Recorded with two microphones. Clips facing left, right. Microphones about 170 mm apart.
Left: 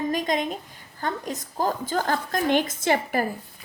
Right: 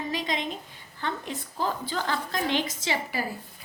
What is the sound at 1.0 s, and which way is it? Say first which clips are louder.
A woman's voice: left 3 dB; 40° left (ahead or behind).